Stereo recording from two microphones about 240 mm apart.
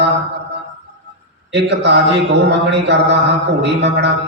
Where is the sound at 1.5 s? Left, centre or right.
Right.